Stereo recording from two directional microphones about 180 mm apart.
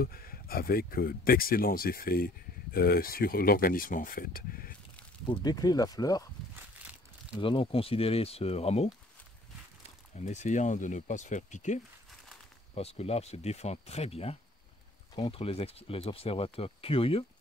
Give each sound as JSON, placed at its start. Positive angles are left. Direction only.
{"t": 0.0, "sound": "speech", "side_deg": 55}
{"t": 5.3, "sound": "speech", "side_deg": 20}
{"t": 6.8, "sound": "a sound", "side_deg": -10}
{"t": 7.3, "sound": "speech", "side_deg": 30}